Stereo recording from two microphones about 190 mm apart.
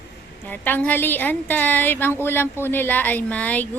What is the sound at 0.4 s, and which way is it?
A woman's voice, 10° left (ahead or behind).